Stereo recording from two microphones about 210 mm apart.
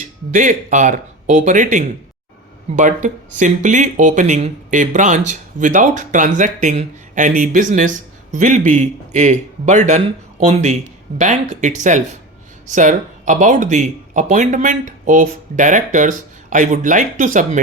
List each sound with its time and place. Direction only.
0.3 s speech: 35° right (ahead or behind)